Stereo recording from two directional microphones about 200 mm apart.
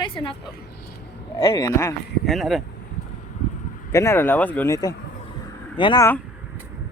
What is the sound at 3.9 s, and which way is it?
Speech, 15° left (ahead or behind).